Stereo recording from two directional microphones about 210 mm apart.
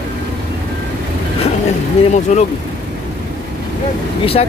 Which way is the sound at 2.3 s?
35° left (ahead or behind).